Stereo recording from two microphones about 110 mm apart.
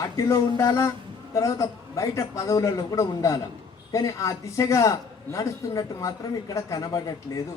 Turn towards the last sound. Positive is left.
turn(degrees=35)  # may be behind; listen again after turning